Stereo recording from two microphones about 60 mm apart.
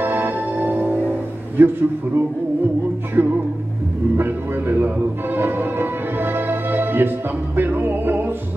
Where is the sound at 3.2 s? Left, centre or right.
Right.